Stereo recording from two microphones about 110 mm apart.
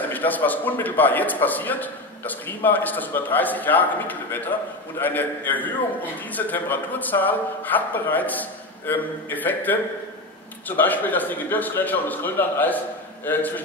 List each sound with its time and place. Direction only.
0.1 s a man's voice: 15° left (ahead or behind)
10.8 s a man's voice: 15° left (ahead or behind)